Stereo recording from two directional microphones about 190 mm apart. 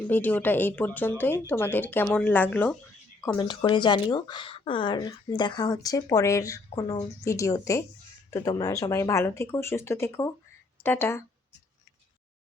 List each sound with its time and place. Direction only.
0.1 s speech: 10° left (ahead or behind)
3.3 s speech: 25° left (ahead or behind)